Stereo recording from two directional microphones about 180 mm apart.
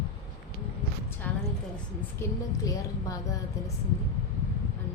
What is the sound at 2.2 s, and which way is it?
Speech, 20° left (ahead or behind).